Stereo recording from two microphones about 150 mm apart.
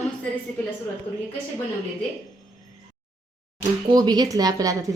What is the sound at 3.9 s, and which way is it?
Speech, 25° right (ahead or behind).